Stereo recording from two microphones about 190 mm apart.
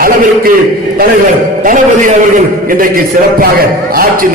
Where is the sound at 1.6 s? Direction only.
45° right (ahead or behind).